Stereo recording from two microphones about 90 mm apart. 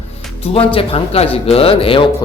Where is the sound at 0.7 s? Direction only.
80° left.